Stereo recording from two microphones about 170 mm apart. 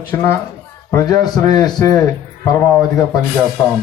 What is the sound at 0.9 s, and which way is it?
A man's voice, 20° left (ahead or behind).